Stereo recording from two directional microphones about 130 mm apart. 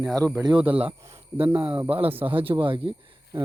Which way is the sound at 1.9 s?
45° right (ahead or behind).